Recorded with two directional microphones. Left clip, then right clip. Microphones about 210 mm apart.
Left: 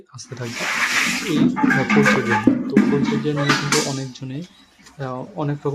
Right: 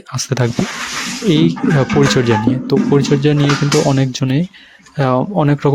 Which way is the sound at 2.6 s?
40° right (ahead or behind).